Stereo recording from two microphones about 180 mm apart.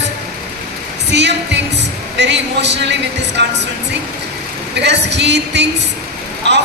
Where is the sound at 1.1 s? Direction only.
75° right (ahead or behind).